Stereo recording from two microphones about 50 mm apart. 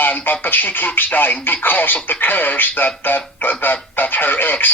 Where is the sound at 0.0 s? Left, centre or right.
Left.